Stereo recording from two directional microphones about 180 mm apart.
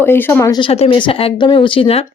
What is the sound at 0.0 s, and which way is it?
Speech, 10° left (ahead or behind).